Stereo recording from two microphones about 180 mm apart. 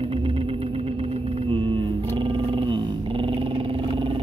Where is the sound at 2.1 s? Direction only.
30° right (ahead or behind).